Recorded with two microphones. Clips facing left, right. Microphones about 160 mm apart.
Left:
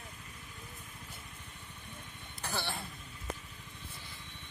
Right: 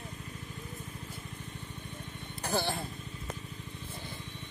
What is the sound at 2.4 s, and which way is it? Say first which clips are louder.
Vehicle: right 7 dB; 45° right (ahead or behind).